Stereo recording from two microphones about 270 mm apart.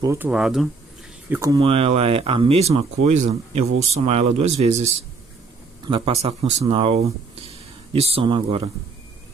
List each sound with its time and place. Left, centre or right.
0.0 s speech: centre
1.3 s speech: centre